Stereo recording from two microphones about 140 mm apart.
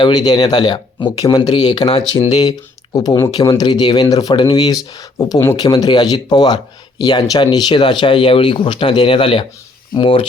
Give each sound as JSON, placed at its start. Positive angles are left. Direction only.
{"t": 0.0, "sound": "speech", "side_deg": 30}